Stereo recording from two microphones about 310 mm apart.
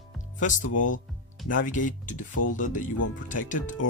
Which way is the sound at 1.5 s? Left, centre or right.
Left.